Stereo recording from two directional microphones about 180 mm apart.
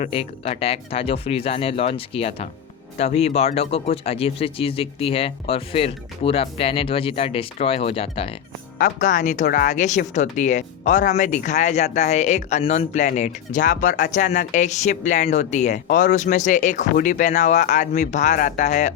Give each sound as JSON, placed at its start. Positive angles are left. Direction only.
{"t": 0.0, "sound": "speech", "side_deg": 35}
{"t": 8.8, "sound": "speech", "side_deg": 45}